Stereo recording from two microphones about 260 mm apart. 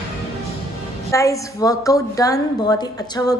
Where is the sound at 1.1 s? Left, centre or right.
Centre.